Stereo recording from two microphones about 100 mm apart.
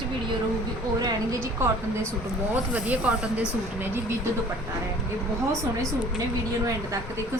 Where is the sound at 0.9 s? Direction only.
35° right (ahead or behind).